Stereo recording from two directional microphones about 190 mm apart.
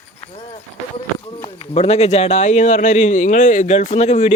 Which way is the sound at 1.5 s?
30° left (ahead or behind).